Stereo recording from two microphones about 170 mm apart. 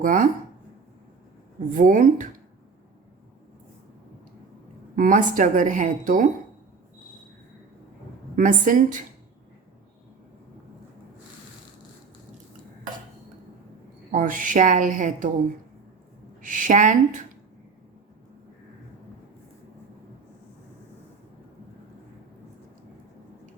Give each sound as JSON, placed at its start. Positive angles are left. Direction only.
{"t": 0.0, "sound": "a woman's voice", "side_deg": -50}
{"t": 1.7, "sound": "a woman's voice", "side_deg": -50}
{"t": 4.9, "sound": "a woman's voice", "side_deg": -50}
{"t": 8.4, "sound": "a woman's voice", "side_deg": -50}
{"t": 14.1, "sound": "a woman's voice", "side_deg": -50}
{"t": 16.4, "sound": "a woman's voice", "side_deg": -50}